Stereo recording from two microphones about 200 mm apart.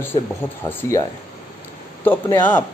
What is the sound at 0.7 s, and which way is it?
Speech, 10° left (ahead or behind).